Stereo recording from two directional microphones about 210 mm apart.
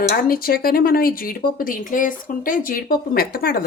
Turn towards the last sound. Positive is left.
turn(degrees=45)  # may be behind; listen again after turning